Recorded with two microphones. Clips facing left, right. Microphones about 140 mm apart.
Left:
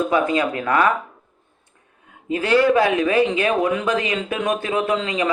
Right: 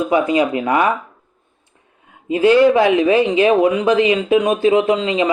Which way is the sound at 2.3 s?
20° right (ahead or behind).